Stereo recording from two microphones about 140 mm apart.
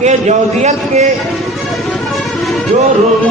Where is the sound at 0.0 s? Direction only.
55° right (ahead or behind).